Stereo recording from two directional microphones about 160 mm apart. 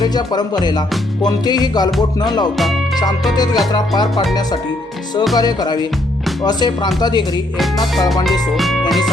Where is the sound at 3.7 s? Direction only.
25° left (ahead or behind).